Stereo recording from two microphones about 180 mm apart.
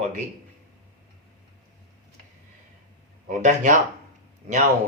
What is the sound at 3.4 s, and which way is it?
Speech, 45° right (ahead or behind).